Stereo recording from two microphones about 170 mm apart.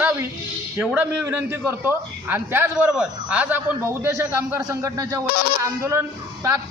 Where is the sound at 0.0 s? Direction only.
10° right (ahead or behind).